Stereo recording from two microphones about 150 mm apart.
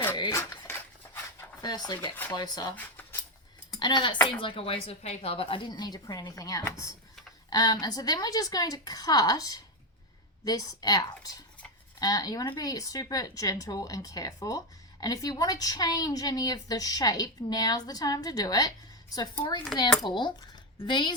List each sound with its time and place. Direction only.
0.3 s cutlery: 15° left (ahead or behind)
1.6 s speech: 30° left (ahead or behind)
2.7 s a sound: 10° left (ahead or behind)
3.8 s speech: 30° left (ahead or behind)